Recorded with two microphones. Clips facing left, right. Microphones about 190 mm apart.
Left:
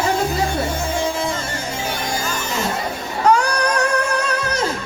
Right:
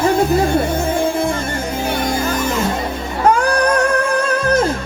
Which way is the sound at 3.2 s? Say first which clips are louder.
Right 3 dB; 50° right (ahead or behind).